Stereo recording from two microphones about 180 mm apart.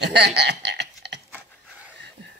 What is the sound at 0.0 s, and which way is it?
Speech, 70° right (ahead or behind).